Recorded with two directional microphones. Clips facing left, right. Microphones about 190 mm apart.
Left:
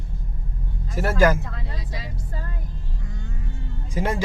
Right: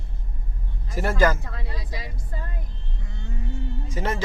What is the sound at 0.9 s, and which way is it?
Speech, 5° left (ahead or behind).